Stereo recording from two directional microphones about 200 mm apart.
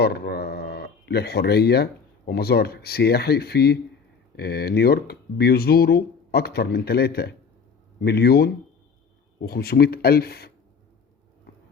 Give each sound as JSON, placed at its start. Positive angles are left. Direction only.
{"t": 0.0, "sound": "speech", "side_deg": 55}